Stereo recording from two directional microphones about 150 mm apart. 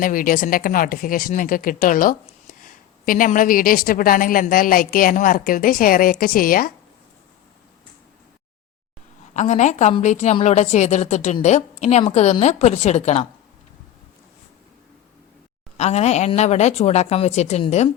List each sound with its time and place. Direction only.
0.0 s a woman's voice: 70° left (ahead or behind)
9.3 s a woman's voice: 50° left (ahead or behind)
15.8 s a woman's voice: 45° left (ahead or behind)